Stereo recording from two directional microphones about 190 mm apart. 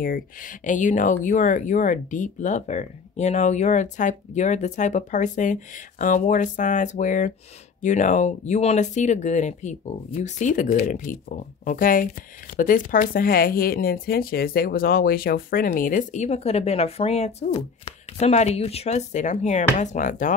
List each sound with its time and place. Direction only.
0.0 s speech: 45° left (ahead or behind)